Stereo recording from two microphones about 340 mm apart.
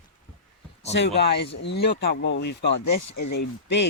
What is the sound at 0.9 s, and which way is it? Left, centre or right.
Speech, left.